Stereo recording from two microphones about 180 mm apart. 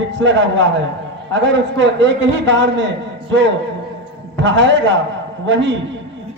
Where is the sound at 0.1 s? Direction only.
90° right.